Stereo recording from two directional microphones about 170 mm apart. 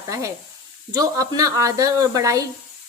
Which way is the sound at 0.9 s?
20° right (ahead or behind).